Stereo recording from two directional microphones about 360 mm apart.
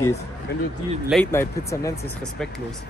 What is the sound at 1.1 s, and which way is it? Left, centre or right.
Speech, centre.